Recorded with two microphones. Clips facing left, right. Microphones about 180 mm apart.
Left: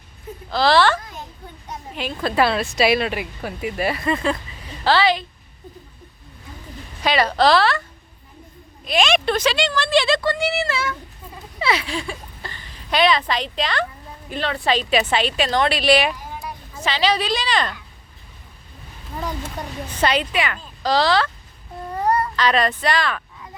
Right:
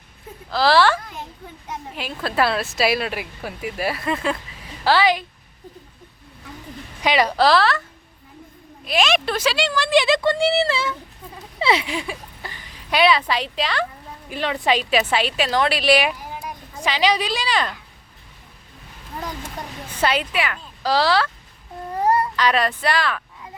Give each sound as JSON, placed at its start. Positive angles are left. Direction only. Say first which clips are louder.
{"t": 0.5, "sound": "a woman's voice", "louder": "even", "side_deg": -5}
{"t": 2.0, "sound": "a woman's voice", "louder": "left 2 dB", "side_deg": -5}
{"t": 7.0, "sound": "speech", "louder": "even", "side_deg": -15}
{"t": 8.9, "sound": "a woman's voice", "louder": "left 2 dB", "side_deg": -5}
{"t": 10.2, "sound": "a woman's voice", "louder": "right 3 dB", "side_deg": -30}
{"t": 20.0, "sound": "speech", "louder": "left 1 dB", "side_deg": -5}